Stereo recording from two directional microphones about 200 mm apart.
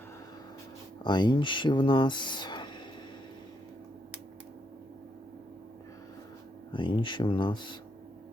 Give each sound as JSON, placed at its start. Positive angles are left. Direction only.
{"t": 1.0, "sound": "speech", "side_deg": 20}
{"t": 6.7, "sound": "speech", "side_deg": 25}